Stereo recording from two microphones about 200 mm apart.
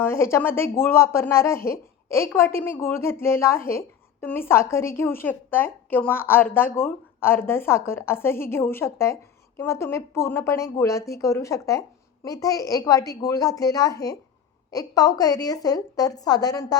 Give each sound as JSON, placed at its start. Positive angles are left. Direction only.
{"t": 0.0, "sound": "a woman's voice", "side_deg": 15}